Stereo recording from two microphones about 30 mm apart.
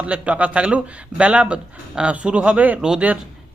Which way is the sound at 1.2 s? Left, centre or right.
Right.